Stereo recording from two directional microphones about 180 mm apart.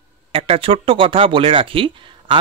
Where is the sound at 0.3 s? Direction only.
35° right (ahead or behind).